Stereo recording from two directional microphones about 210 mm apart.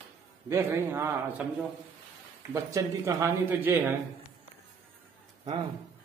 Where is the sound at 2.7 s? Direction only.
15° right (ahead or behind).